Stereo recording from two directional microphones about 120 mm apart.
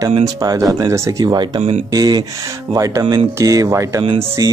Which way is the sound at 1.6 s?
55° right (ahead or behind).